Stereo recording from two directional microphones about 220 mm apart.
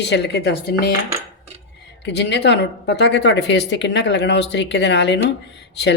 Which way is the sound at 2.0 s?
50° left (ahead or behind).